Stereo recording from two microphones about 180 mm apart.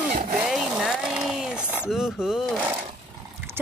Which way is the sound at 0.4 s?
5° right (ahead or behind).